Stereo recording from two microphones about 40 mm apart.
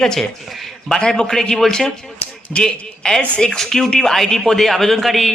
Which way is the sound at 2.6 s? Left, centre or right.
Centre.